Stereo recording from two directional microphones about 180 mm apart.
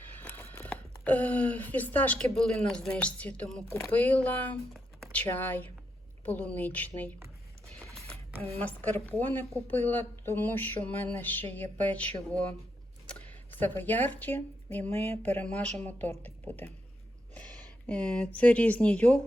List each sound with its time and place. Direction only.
0.2 s speech: 10° left (ahead or behind)
8.5 s speech: 10° left (ahead or behind)
17.8 s speech: 10° left (ahead or behind)